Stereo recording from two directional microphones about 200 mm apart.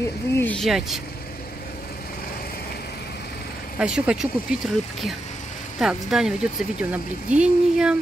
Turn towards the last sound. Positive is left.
turn(degrees=-5)  # may be behind; listen again after turning